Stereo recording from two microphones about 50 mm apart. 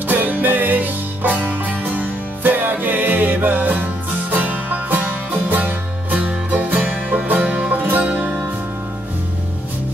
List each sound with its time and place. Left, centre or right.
0.1 s music: right